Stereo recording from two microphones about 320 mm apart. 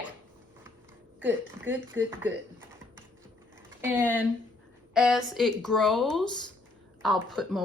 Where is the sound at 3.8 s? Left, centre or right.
Centre.